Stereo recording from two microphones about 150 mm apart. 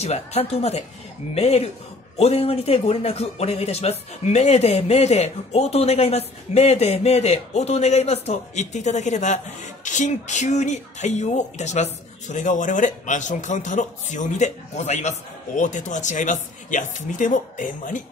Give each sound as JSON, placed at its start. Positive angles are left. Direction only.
{"t": 0.0, "sound": "speech", "side_deg": 45}